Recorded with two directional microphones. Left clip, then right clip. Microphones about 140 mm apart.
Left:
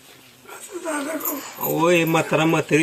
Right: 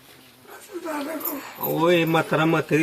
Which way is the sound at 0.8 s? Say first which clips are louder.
Left 3 dB; 10° right (ahead or behind).